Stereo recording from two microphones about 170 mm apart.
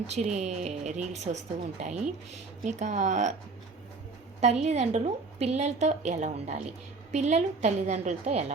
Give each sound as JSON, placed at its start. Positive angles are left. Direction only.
{"t": 0.1, "sound": "speech", "side_deg": -40}
{"t": 4.6, "sound": "a woman's voice", "side_deg": -40}